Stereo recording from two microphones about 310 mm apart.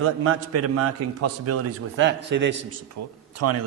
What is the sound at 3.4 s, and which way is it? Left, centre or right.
Speech, right.